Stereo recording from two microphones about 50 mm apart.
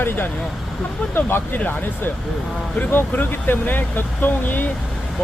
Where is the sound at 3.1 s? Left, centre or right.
Left.